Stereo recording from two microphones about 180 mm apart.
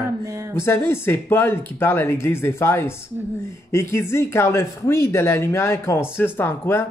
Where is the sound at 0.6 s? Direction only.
15° left (ahead or behind).